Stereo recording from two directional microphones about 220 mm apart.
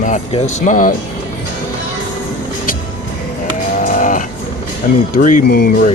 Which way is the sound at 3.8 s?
35° left (ahead or behind).